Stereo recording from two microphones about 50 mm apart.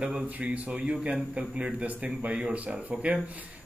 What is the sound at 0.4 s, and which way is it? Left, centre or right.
Speech, right.